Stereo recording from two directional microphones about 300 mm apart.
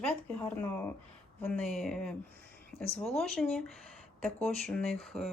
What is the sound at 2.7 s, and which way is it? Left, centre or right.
Speech, centre.